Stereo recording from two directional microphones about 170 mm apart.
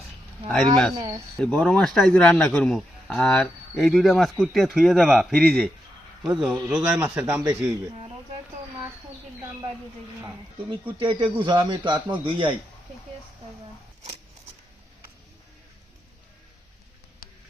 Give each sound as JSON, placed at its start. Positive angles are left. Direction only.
{"t": 0.4, "sound": "speech", "side_deg": 5}
{"t": 0.9, "sound": "a man's voice", "side_deg": -20}
{"t": 1.4, "sound": "a man's voice", "side_deg": 5}
{"t": 10.7, "sound": "a man's voice", "side_deg": -30}
{"t": 17.2, "sound": "a sound", "side_deg": 55}